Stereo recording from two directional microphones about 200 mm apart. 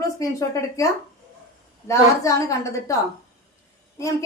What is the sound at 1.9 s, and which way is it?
A woman's voice, 15° left (ahead or behind).